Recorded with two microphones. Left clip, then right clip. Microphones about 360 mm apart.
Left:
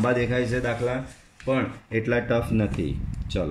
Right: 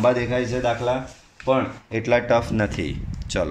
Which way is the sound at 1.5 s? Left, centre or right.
Centre.